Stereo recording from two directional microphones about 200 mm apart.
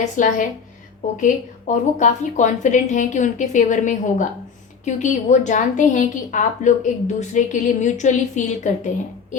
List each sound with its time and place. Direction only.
0.2 s a woman's voice: 40° left (ahead or behind)